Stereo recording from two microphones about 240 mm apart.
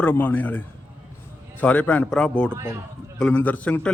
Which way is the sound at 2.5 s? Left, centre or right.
Centre.